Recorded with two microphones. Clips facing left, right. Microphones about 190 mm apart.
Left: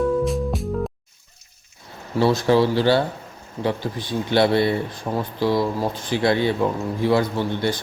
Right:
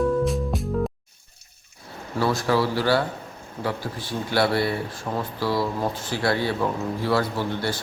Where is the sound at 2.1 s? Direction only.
25° left (ahead or behind).